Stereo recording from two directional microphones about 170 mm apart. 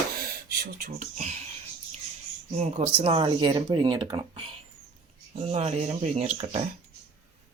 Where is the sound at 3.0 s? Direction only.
35° right (ahead or behind).